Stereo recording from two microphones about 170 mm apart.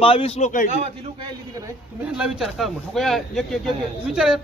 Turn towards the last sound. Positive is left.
turn(degrees=-5)  # may be behind; listen again after turning